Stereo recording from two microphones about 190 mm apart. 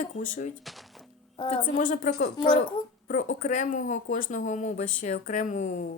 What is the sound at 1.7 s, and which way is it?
A woman's voice, 45° left (ahead or behind).